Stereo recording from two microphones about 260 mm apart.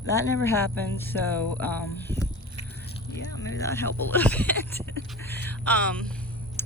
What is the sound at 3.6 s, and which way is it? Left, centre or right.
Speech, centre.